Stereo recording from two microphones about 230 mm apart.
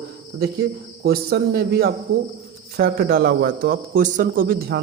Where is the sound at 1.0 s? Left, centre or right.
Right.